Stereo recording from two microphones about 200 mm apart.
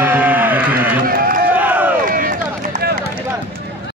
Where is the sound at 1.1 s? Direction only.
45° right (ahead or behind).